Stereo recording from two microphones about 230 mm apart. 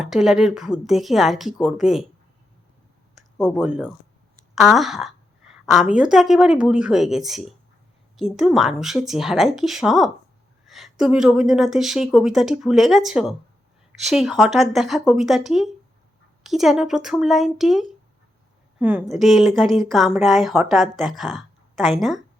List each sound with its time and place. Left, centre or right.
0.0 s speech: centre
3.3 s speech: centre